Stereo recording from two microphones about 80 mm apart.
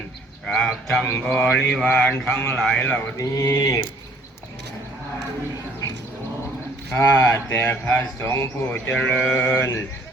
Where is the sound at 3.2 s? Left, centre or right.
Left.